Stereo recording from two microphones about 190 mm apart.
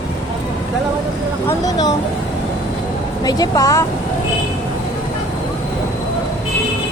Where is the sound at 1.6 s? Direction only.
20° left (ahead or behind).